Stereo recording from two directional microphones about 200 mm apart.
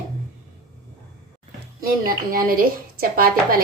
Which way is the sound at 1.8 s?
45° right (ahead or behind).